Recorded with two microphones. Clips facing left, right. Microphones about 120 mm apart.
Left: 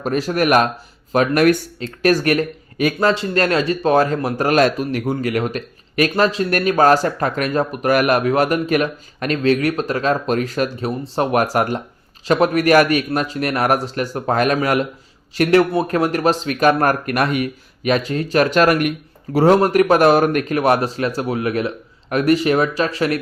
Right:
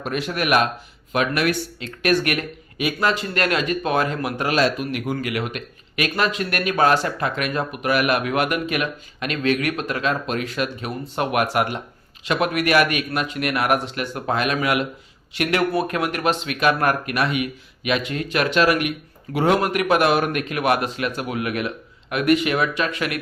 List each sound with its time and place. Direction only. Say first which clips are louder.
0.0 s speech: left 6 dB; 40° left (ahead or behind)